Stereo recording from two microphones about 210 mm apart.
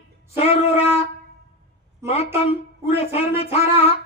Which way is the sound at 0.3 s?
30° left (ahead or behind).